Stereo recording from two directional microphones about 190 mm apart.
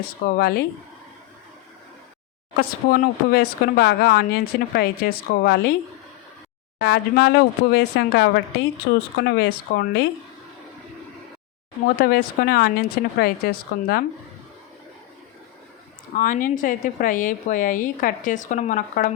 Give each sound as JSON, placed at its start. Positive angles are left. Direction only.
{"t": 0.0, "sound": "speech", "side_deg": 55}
{"t": 2.6, "sound": "speech", "side_deg": 50}
{"t": 6.7, "sound": "speech", "side_deg": 65}
{"t": 8.9, "sound": "speech", "side_deg": 55}
{"t": 11.9, "sound": "speech", "side_deg": 50}
{"t": 16.1, "sound": "speech", "side_deg": 45}